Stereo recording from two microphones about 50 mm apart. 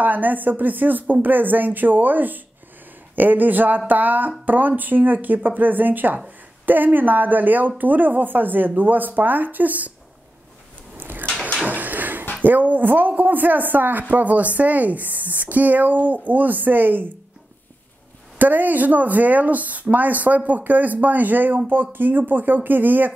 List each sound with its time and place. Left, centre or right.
0.0 s speech: right
11.0 s a sound: right
12.4 s speech: right
18.4 s speech: right